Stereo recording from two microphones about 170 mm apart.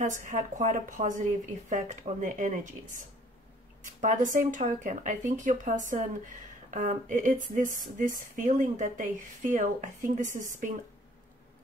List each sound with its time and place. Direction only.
0.0 s speech: 45° right (ahead or behind)
4.0 s speech: 50° right (ahead or behind)